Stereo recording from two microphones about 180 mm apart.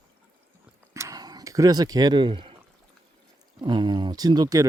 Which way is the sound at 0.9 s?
15° right (ahead or behind).